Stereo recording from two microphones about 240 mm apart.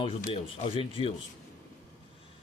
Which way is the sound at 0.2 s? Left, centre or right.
Left.